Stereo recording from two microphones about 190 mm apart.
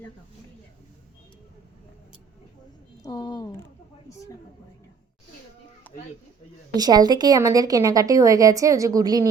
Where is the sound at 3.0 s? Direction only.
20° left (ahead or behind).